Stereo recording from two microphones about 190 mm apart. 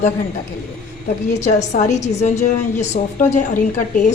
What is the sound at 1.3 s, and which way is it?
A woman's voice, 35° left (ahead or behind).